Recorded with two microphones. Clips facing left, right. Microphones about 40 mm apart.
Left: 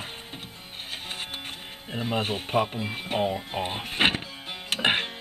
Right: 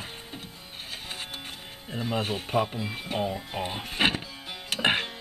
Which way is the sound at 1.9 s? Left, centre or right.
Left.